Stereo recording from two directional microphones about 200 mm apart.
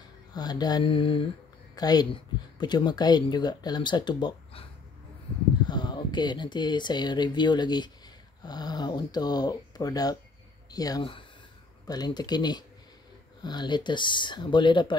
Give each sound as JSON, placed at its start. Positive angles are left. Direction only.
{"t": 0.3, "sound": "speech", "side_deg": 20}
{"t": 5.7, "sound": "speech", "side_deg": 20}